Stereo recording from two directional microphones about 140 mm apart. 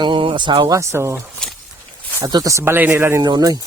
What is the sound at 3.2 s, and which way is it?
Speech, 30° right (ahead or behind).